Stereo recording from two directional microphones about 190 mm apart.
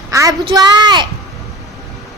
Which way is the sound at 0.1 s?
15° right (ahead or behind).